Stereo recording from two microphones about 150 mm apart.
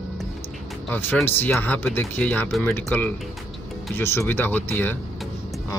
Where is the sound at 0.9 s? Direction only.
10° left (ahead or behind).